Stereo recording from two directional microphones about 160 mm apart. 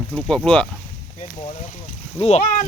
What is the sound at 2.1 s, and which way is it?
Speech, 40° left (ahead or behind).